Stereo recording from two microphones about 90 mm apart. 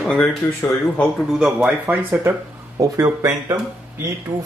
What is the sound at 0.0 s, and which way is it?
Speech, 10° left (ahead or behind).